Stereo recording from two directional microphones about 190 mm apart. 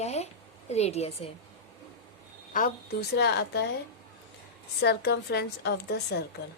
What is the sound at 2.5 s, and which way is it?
A woman's voice, 50° left (ahead or behind).